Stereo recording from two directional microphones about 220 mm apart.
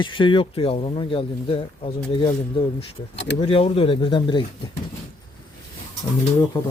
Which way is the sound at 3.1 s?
55° left (ahead or behind).